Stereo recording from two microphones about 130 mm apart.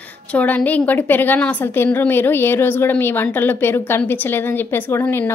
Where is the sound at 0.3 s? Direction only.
10° left (ahead or behind).